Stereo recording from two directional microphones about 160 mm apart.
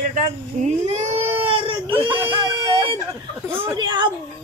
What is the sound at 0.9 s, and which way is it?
Baby cry, 45° right (ahead or behind).